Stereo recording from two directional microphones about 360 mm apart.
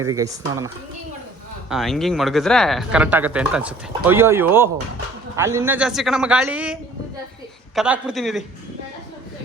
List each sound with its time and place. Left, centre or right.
0.0 s speech: centre
1.7 s speech: centre
7.8 s speech: centre